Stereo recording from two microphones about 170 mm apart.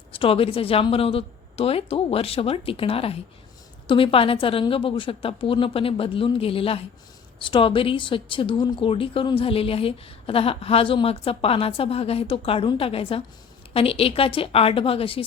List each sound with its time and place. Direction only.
0.1 s a woman's voice: 35° left (ahead or behind)